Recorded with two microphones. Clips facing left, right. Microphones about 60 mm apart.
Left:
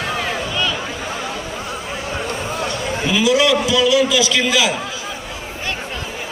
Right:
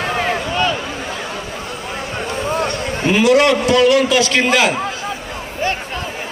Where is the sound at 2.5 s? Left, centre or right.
Right.